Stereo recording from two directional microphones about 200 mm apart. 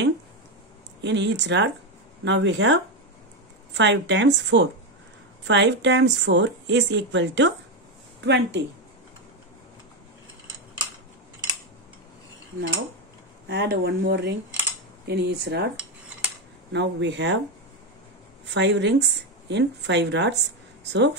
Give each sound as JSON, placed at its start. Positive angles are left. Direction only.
{"t": 1.0, "sound": "speech", "side_deg": -60}
{"t": 13.5, "sound": "speech", "side_deg": -55}
{"t": 18.5, "sound": "speech", "side_deg": -60}